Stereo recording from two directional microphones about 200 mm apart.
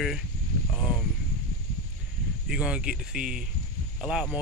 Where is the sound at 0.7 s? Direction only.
Centre (ahead or behind).